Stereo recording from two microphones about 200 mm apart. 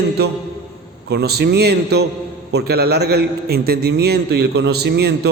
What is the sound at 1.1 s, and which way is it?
A man's voice, 55° right (ahead or behind).